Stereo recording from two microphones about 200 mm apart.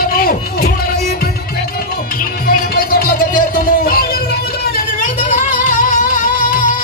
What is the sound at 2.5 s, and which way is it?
Music, 45° left (ahead or behind).